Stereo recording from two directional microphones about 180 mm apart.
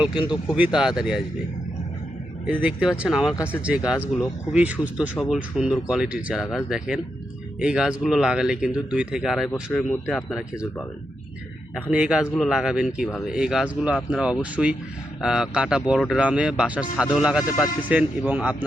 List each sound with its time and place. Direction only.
0.3 s speech: 5° right (ahead or behind)
2.5 s speech: 5° right (ahead or behind)
3.3 s speech: 10° left (ahead or behind)
3.6 s speech: 5° right (ahead or behind)
11.7 s speech: 5° right (ahead or behind)